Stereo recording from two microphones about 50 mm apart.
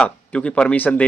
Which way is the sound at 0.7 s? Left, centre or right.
Left.